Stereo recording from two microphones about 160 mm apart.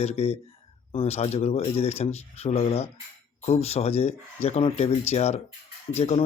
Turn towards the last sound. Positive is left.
turn(degrees=40)  # may be behind; listen again after turning